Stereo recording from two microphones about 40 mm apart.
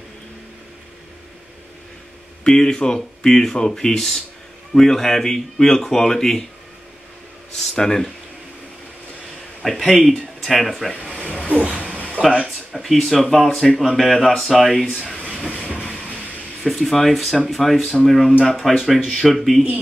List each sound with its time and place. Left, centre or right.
2.4 s speech: centre
7.7 s speech: centre
9.6 s a sound: centre
9.9 s speech: centre
12.2 s speech: right
12.9 s speech: centre
15.3 s train: left
16.6 s speech: centre